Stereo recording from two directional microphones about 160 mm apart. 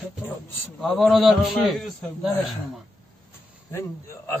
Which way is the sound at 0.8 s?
Centre (ahead or behind).